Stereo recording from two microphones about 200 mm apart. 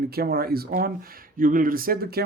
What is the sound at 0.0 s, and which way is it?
Speech, 50° right (ahead or behind).